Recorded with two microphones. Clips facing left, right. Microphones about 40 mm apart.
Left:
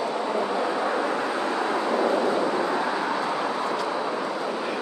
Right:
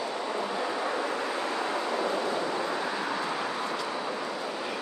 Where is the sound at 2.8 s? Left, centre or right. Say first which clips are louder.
Left 5 dB; left.